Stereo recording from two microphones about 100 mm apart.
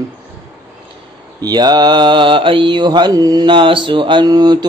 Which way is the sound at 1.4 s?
45° right (ahead or behind).